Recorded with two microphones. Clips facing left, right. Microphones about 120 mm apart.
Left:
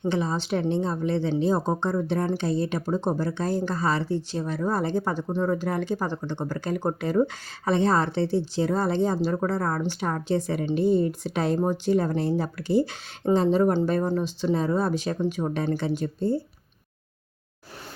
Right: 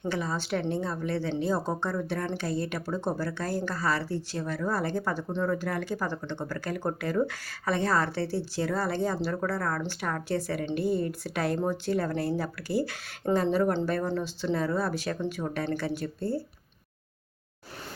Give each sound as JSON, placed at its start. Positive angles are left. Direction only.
{"t": 0.0, "sound": "speech", "side_deg": 20}